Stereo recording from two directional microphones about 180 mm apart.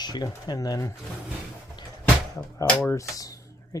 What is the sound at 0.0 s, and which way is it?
Speech, 20° left (ahead or behind).